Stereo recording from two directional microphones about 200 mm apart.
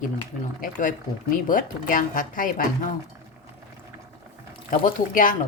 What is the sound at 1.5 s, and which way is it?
Speech, 40° left (ahead or behind).